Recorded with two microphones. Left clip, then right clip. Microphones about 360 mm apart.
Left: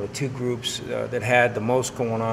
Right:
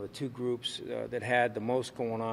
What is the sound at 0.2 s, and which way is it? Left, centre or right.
Speech, right.